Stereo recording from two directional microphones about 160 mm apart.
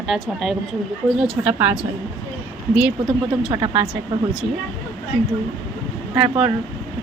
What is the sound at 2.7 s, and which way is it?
Speech, 10° right (ahead or behind).